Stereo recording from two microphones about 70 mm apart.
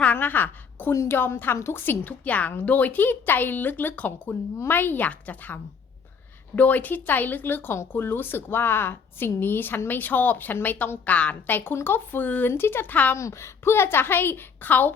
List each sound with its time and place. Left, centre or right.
0.0 s a sound: left
1.0 s a woman's voice: left
6.6 s speech: left
12.5 s a woman's voice: left
13.1 s a woman's voice: left